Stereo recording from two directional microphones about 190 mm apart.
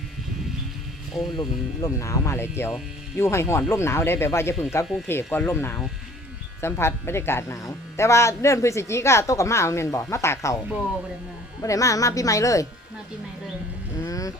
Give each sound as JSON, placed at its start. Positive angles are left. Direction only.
{"t": 1.1, "sound": "speech", "side_deg": 0}
{"t": 1.4, "sound": "speech", "side_deg": 15}
{"t": 11.6, "sound": "speech", "side_deg": 15}
{"t": 14.0, "sound": "a sound", "side_deg": 15}